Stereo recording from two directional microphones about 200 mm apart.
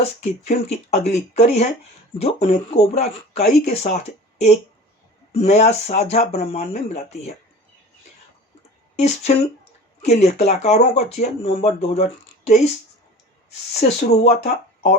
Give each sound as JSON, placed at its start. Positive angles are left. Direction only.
{"t": 0.2, "sound": "speech", "side_deg": 35}
{"t": 9.0, "sound": "speech", "side_deg": 35}
{"t": 13.7, "sound": "speech", "side_deg": 35}